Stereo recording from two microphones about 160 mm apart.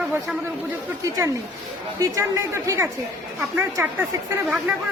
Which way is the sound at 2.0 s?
20° right (ahead or behind).